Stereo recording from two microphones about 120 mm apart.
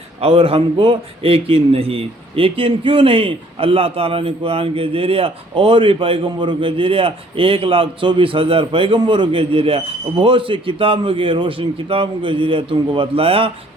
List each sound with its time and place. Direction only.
0.2 s a man's voice: 50° right (ahead or behind)